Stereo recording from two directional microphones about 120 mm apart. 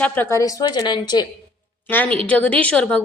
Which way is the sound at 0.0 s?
15° left (ahead or behind).